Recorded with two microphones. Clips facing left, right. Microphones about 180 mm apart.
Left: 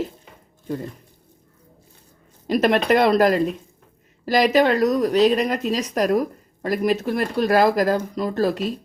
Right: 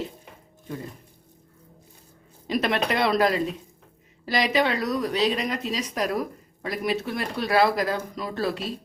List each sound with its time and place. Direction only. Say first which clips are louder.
2.5 s speech: left 7 dB; 45° left (ahead or behind)